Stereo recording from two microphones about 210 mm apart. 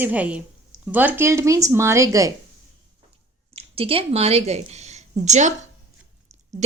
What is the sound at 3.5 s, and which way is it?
A woman's voice, 25° right (ahead or behind).